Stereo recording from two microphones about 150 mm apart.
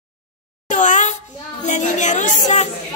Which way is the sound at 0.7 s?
55° left (ahead or behind).